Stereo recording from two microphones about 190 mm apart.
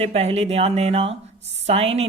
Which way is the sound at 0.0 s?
35° right (ahead or behind).